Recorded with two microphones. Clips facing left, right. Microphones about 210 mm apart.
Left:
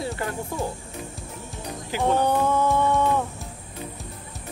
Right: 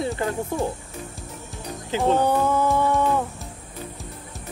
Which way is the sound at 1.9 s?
20° right (ahead or behind).